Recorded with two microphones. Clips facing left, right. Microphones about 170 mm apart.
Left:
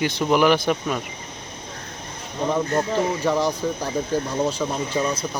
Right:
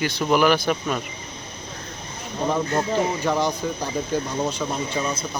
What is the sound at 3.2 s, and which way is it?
Speech, centre (ahead or behind).